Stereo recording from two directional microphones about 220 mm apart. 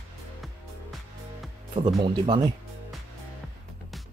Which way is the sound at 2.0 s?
20° right (ahead or behind).